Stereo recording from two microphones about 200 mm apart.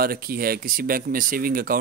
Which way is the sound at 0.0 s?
50° right (ahead or behind).